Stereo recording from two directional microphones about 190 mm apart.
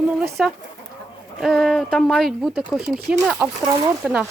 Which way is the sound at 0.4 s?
Centre (ahead or behind).